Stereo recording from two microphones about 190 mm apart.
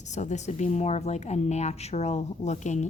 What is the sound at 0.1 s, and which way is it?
Speech, 40° left (ahead or behind).